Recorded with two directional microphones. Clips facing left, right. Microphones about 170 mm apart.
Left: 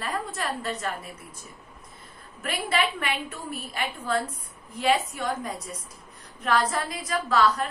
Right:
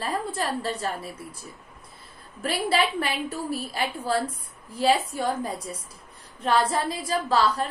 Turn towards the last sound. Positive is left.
turn(degrees=-30)  # may be behind; listen again after turning